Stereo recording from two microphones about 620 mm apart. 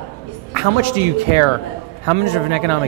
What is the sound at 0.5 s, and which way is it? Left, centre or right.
A man's voice, right.